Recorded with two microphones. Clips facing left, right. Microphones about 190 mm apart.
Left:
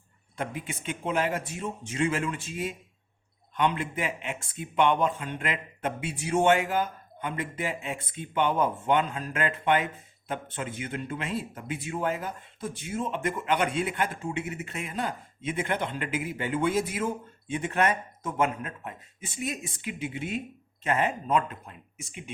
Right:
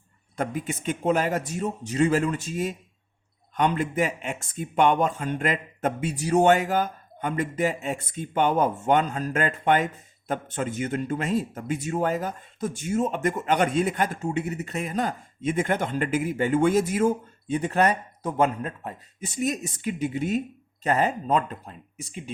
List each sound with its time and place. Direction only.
0.3 s speech: 45° right (ahead or behind)